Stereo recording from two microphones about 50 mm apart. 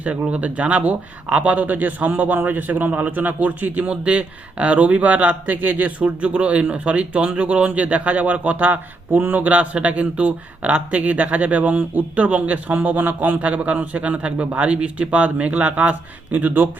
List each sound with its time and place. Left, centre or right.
0.0 s speech: right